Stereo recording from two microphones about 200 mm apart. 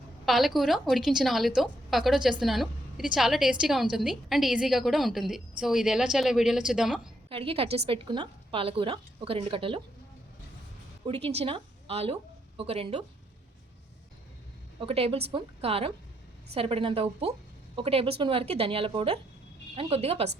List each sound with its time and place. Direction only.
0.3 s a woman's voice: centre (ahead or behind)
7.3 s a woman's voice: 30° right (ahead or behind)
11.0 s a woman's voice: 30° right (ahead or behind)
14.8 s a woman's voice: 30° right (ahead or behind)